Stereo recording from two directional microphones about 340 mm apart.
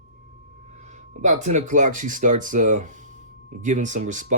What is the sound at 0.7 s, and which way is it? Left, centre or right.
Speech, right.